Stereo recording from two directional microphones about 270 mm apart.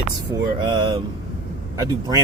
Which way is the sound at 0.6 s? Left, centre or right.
Centre.